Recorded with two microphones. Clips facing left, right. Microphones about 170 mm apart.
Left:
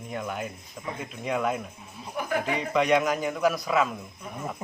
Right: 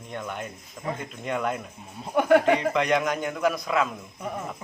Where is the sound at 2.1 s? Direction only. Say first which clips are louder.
Right 10 dB; 75° right (ahead or behind).